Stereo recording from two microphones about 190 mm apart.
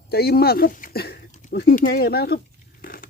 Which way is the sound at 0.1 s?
55° left (ahead or behind).